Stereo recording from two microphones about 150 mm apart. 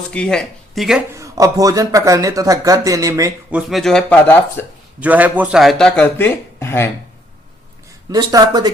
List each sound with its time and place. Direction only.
0.1 s speech: 5° left (ahead or behind)
1.1 s speech: 20° right (ahead or behind)
3.5 s speech: centre (ahead or behind)
4.9 s a man's voice: 10° right (ahead or behind)
6.1 s speech: 15° left (ahead or behind)
8.1 s speech: 25° right (ahead or behind)